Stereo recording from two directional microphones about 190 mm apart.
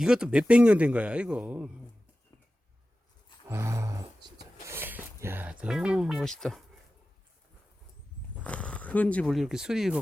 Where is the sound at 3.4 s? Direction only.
15° right (ahead or behind).